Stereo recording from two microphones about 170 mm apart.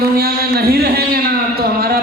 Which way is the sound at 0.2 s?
65° right (ahead or behind).